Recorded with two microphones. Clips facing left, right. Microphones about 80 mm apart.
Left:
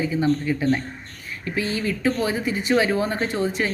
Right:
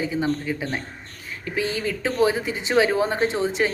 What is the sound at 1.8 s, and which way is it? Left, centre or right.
Speech, right.